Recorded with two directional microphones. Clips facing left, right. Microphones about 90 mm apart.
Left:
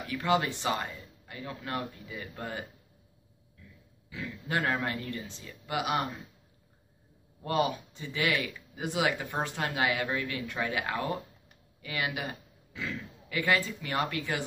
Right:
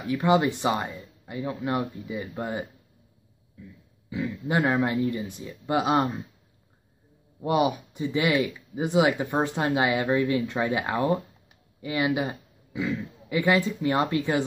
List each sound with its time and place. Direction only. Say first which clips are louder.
0.0 s speech: right 6 dB; 20° right (ahead or behind)
4.1 s speech: right 6 dB; 20° right (ahead or behind)
7.4 s a man's voice: right 5 dB; 15° right (ahead or behind)